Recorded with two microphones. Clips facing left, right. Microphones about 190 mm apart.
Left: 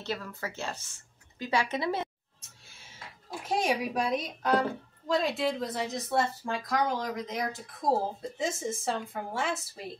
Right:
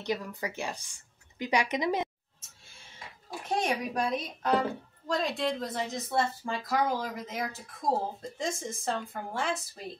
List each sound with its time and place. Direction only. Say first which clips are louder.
0.0 s speech: right 3 dB; 15° right (ahead or behind)
3.4 s a woman's voice: left 1 dB; 5° left (ahead or behind)